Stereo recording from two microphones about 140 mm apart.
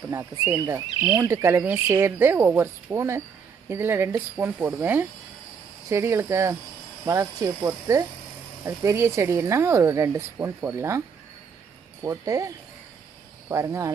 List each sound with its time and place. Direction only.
0.1 s speech: 20° right (ahead or behind)
12.0 s speech: 25° right (ahead or behind)